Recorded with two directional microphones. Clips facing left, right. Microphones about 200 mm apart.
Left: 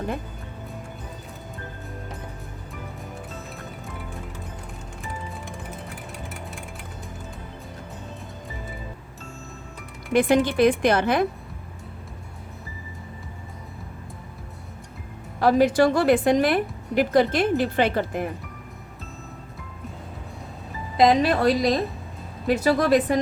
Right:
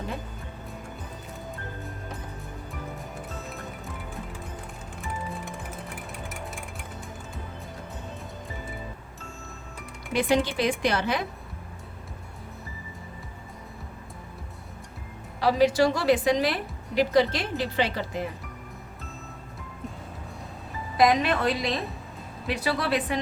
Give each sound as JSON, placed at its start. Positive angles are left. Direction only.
{"t": 10.1, "sound": "a woman's voice", "side_deg": 55}
{"t": 15.4, "sound": "a woman's voice", "side_deg": 50}
{"t": 20.9, "sound": "a woman's voice", "side_deg": 25}